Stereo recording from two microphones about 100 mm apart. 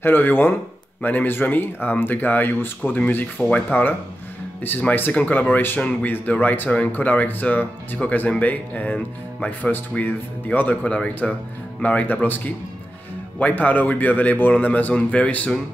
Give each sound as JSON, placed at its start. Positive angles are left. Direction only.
{"t": 0.0, "sound": "speech", "side_deg": 20}